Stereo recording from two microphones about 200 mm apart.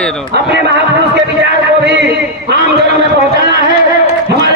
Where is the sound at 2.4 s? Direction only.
55° right (ahead or behind).